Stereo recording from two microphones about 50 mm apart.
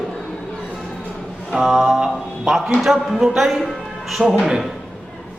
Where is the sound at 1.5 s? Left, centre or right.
Centre.